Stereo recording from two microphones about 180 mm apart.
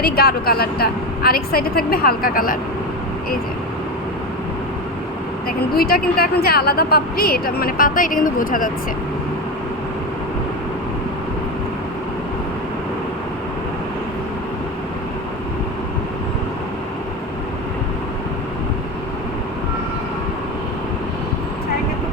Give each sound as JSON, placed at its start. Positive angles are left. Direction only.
{"t": 0.0, "sound": "a woman's voice", "side_deg": 60}
{"t": 5.5, "sound": "a woman's voice", "side_deg": 55}